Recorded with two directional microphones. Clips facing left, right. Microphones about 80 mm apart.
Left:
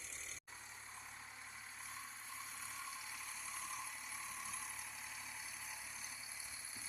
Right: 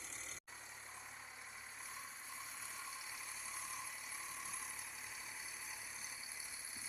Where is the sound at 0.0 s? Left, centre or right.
Right.